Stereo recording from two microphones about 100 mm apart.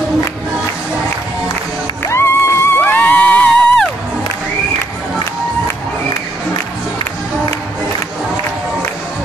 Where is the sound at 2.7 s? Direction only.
20° left (ahead or behind).